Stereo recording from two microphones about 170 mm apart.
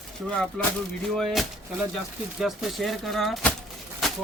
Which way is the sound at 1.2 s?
Centre (ahead or behind).